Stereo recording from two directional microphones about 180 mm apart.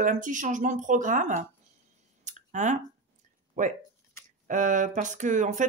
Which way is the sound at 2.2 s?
40° right (ahead or behind).